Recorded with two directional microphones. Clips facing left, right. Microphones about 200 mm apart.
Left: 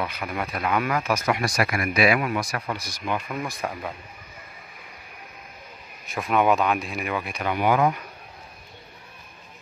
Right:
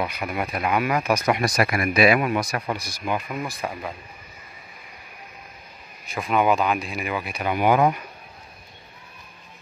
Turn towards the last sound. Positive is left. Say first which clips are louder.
# right 2 dB
turn(degrees=-15)  # may be behind; listen again after turning